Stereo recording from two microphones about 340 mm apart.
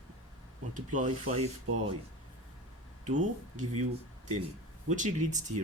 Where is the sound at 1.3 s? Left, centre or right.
Right.